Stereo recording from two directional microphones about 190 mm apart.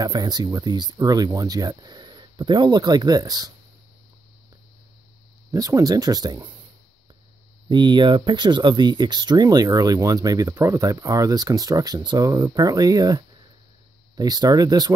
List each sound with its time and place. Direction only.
0.0 s speech: 20° right (ahead or behind)
5.5 s speech: 15° right (ahead or behind)
7.7 s speech: 25° right (ahead or behind)